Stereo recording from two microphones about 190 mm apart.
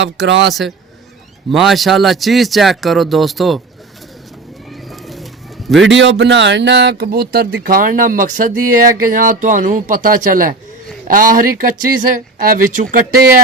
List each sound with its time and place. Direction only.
0.4 s speech: centre (ahead or behind)
4.7 s bird: centre (ahead or behind)
5.8 s speech: 75° right (ahead or behind); by 13.3 s 45° right (ahead or behind)